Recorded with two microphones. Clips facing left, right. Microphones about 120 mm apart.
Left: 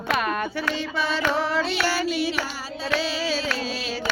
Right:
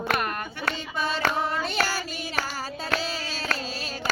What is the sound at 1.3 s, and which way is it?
Child singing, 90° left.